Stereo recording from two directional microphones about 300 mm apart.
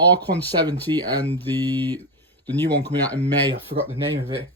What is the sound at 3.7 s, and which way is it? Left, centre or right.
Speech, right.